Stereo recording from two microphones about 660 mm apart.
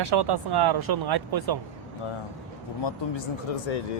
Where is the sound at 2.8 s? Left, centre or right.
Left.